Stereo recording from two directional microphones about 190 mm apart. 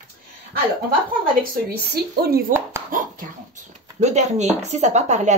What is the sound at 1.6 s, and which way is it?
Speech, 55° right (ahead or behind).